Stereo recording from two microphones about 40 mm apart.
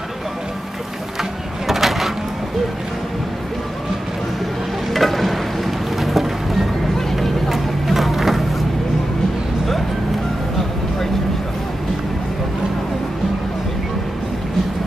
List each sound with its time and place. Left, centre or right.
1.7 s a sound: centre
4.9 s music: centre
7.1 s vehicle: centre